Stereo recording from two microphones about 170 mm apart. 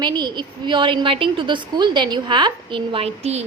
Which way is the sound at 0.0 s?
25° right (ahead or behind).